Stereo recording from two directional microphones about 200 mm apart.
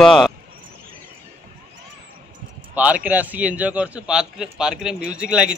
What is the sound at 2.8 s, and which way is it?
A man's voice, 5° right (ahead or behind).